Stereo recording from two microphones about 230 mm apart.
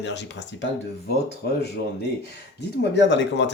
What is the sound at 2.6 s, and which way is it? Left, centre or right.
Speech, left.